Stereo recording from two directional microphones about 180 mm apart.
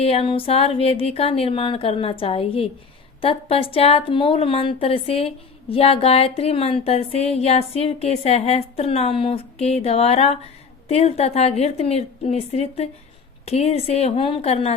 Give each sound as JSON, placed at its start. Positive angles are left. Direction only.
{"t": 0.0, "sound": "a woman's voice", "side_deg": 35}